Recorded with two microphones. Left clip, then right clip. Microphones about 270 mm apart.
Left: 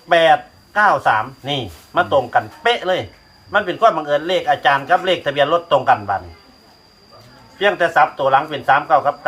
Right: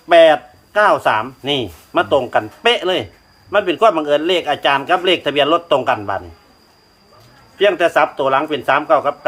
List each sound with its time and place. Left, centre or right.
0.1 s speech: right
7.6 s speech: right